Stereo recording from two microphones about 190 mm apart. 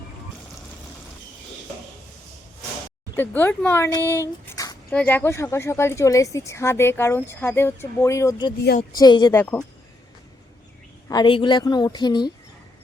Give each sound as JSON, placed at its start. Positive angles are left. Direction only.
{"t": 3.2, "sound": "a woman's voice", "side_deg": 10}
{"t": 9.4, "sound": "speech", "side_deg": 10}
{"t": 11.1, "sound": "a woman's voice", "side_deg": 25}